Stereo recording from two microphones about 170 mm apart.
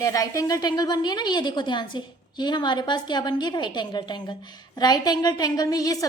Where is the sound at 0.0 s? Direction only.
20° left (ahead or behind).